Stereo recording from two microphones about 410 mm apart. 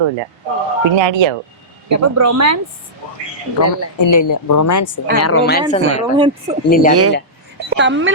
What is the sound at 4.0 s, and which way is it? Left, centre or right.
Speech, left.